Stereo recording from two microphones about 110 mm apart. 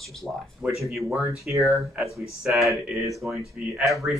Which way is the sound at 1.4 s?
30° right (ahead or behind).